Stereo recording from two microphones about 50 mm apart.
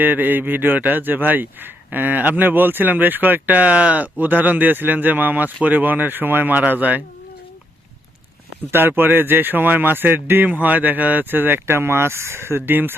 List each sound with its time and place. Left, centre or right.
0.0 s speech: right
8.7 s speech: right